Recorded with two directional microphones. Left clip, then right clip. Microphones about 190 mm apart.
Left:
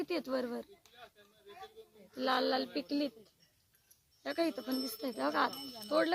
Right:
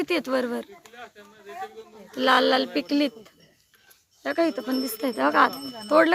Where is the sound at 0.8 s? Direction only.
55° left (ahead or behind).